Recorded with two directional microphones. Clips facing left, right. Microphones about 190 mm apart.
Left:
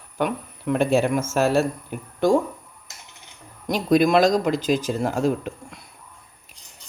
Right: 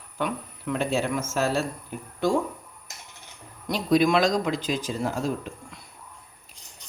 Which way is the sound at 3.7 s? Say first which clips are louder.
Left 3 dB; 45° left (ahead or behind).